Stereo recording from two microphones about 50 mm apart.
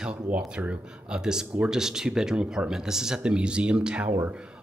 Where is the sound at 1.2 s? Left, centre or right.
Centre.